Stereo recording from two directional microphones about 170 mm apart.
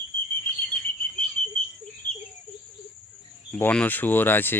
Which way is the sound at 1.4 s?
45° left (ahead or behind).